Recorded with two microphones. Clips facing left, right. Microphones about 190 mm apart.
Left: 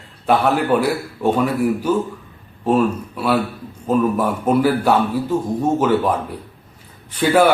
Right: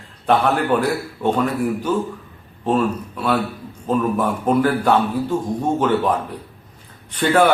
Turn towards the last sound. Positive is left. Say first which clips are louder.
# left 1 dB
turn(degrees=10)  # may be behind; listen again after turning